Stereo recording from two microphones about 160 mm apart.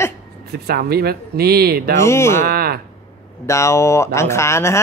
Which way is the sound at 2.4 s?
70° right (ahead or behind).